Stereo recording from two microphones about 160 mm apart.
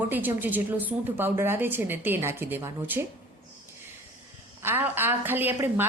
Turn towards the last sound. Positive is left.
turn(degrees=-10)  # may be behind; listen again after turning